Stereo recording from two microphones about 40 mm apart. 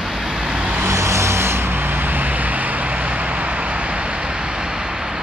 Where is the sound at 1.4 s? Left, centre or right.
Right; by 5.2 s centre.